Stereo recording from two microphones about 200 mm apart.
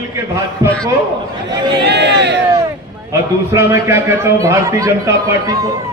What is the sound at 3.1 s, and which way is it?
A man's voice, 15° right (ahead or behind).